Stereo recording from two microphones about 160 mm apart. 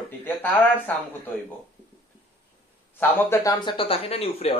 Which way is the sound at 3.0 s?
10° left (ahead or behind).